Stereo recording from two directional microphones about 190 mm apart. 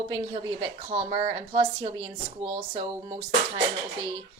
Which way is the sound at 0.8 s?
35° right (ahead or behind).